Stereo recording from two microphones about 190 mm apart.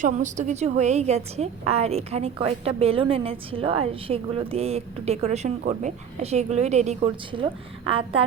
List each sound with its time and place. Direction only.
0.0 s a woman's voice: 40° right (ahead or behind)